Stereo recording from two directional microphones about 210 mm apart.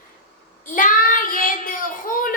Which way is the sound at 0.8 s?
40° left (ahead or behind).